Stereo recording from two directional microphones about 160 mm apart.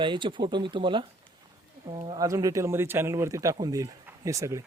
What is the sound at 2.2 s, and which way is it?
Speech, 20° right (ahead or behind).